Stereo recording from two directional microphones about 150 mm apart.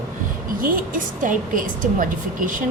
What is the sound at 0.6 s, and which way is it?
A woman's voice, 65° right (ahead or behind).